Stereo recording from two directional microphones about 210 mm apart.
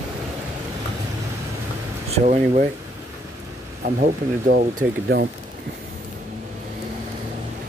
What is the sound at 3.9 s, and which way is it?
Speech, 40° right (ahead or behind).